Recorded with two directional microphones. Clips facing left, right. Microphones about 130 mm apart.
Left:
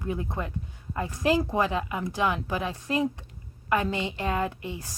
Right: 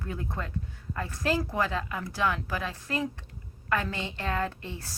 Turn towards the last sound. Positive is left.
turn(degrees=15)  # may be behind; listen again after turning